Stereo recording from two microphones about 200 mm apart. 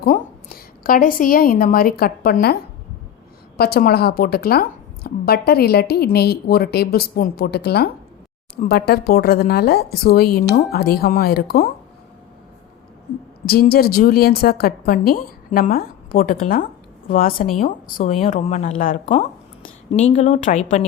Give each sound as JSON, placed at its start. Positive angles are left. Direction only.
{"t": 0.0, "sound": "a woman's voice", "side_deg": 45}
{"t": 3.6, "sound": "a woman's voice", "side_deg": 50}
{"t": 13.4, "sound": "a woman's voice", "side_deg": 50}
{"t": 17.9, "sound": "speech", "side_deg": 35}